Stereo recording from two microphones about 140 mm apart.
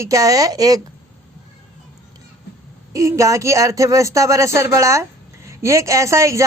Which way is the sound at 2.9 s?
20° right (ahead or behind).